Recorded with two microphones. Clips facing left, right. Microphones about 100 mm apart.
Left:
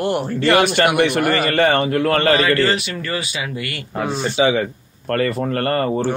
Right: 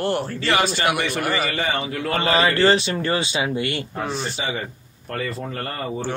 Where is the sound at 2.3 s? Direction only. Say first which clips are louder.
Even; 25° right (ahead or behind).